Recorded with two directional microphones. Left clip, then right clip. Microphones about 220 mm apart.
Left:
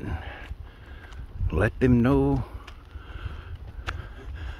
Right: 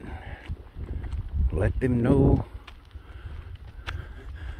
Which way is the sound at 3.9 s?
Centre (ahead or behind).